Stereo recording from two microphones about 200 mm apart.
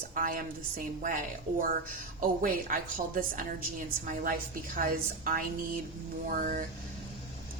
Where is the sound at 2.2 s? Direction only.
45° right (ahead or behind).